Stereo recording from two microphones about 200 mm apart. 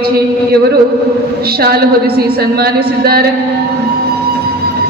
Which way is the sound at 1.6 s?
50° right (ahead or behind).